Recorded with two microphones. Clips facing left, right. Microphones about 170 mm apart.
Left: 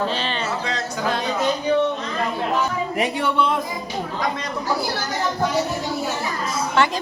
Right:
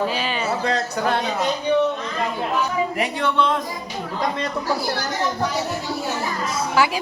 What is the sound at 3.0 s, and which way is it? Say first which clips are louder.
Speech: left 3 dB; 10° left (ahead or behind).